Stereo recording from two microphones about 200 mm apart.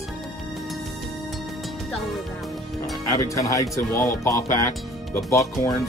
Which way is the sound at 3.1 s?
15° left (ahead or behind).